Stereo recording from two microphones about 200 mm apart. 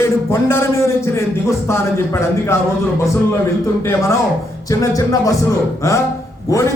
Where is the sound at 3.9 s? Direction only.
15° left (ahead or behind).